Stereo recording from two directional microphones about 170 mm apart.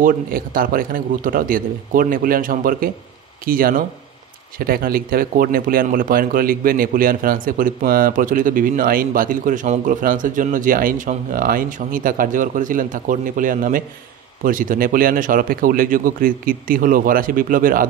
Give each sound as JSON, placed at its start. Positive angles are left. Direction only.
{"t": 0.0, "sound": "speech", "side_deg": -55}